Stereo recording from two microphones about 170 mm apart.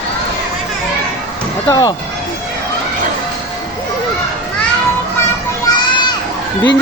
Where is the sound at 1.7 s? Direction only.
25° left (ahead or behind).